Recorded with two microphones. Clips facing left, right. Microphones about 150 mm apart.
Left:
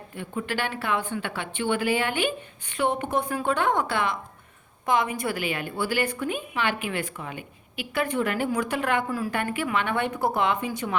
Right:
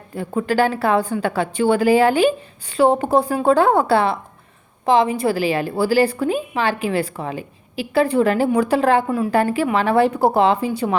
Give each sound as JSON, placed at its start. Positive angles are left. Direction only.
{"t": 0.1, "sound": "a woman's voice", "side_deg": -40}